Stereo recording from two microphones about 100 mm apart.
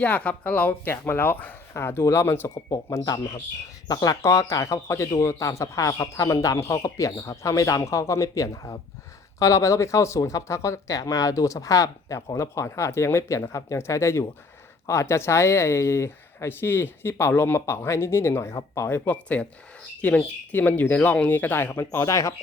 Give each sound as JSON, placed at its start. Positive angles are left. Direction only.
{"t": 0.0, "sound": "speech", "side_deg": 15}
{"t": 2.6, "sound": "a man's voice", "side_deg": 35}